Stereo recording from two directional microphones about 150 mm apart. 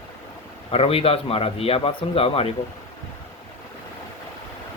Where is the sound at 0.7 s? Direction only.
40° left (ahead or behind).